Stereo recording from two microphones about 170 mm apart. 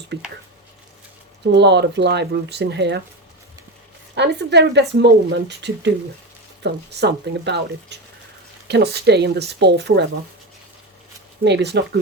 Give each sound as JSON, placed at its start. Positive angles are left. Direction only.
{"t": 0.1, "sound": "speech", "side_deg": -90}
{"t": 1.5, "sound": "speech", "side_deg": -90}
{"t": 4.1, "sound": "speech", "side_deg": -85}
{"t": 11.4, "sound": "speech", "side_deg": -85}